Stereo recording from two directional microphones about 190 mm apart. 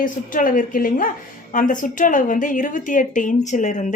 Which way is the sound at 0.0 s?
45° left (ahead or behind).